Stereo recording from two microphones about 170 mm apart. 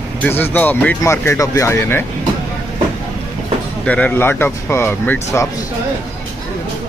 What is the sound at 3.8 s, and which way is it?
Speech, 10° left (ahead or behind).